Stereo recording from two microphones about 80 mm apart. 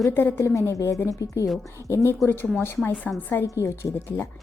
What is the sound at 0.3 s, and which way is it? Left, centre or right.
A woman's voice, left.